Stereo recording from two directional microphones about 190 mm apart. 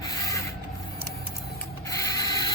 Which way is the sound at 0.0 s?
20° left (ahead or behind).